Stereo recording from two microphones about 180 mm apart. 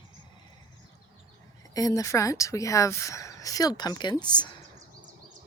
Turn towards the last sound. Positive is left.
turn(degrees=25)  # may be behind; listen again after turning